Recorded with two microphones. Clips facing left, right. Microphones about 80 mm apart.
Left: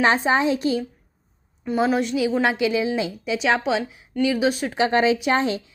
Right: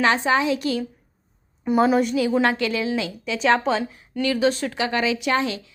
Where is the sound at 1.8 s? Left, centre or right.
Centre.